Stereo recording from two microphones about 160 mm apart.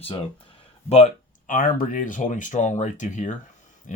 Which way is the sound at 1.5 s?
55° left (ahead or behind).